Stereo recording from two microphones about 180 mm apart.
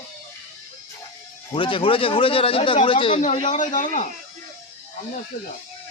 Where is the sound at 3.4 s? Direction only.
45° left (ahead or behind).